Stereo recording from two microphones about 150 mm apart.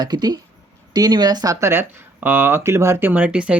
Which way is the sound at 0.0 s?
25° right (ahead or behind).